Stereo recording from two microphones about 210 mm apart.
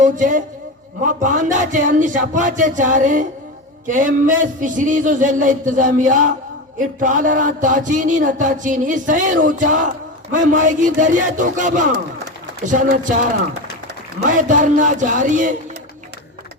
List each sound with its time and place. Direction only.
0.0 s speech: 35° right (ahead or behind)